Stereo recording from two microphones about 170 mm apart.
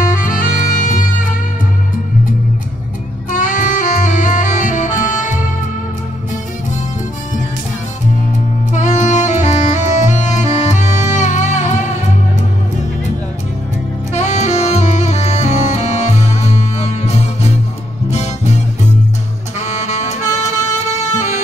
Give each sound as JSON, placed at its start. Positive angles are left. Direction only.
{"t": 0.2, "sound": "music", "side_deg": 50}
{"t": 3.3, "sound": "saxophone", "side_deg": 50}
{"t": 8.7, "sound": "music", "side_deg": 45}
{"t": 14.1, "sound": "saxophone", "side_deg": 40}
{"t": 19.6, "sound": "music", "side_deg": 40}